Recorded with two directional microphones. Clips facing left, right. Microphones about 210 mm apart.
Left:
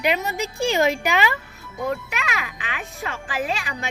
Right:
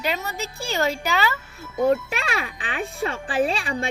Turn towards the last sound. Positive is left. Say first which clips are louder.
# right 4 dB
turn(degrees=-30)  # may be behind; listen again after turning